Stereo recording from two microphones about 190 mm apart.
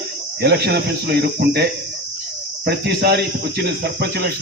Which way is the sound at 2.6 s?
60° right (ahead or behind).